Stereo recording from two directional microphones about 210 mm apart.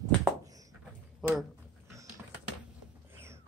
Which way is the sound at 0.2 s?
15° right (ahead or behind).